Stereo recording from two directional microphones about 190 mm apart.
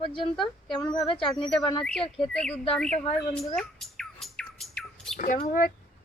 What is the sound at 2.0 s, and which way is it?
Speech, 30° left (ahead or behind).